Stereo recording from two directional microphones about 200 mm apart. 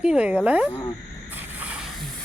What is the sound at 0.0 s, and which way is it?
Speech, 5° right (ahead or behind).